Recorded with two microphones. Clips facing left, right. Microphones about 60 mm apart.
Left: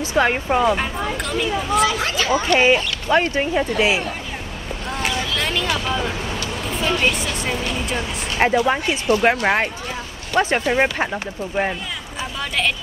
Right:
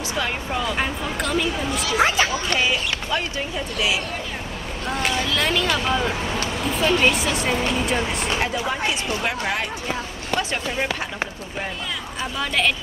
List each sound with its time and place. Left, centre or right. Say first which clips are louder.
0.2 s speech: left 9 dB; left
0.7 s speech: left 1 dB; centre
2.0 s speech: right 4 dB; right
2.3 s speech: left 7 dB; left
5.2 s speech: right 1 dB; centre
8.4 s speech: left 6 dB; left
12.4 s speech: right 1 dB; centre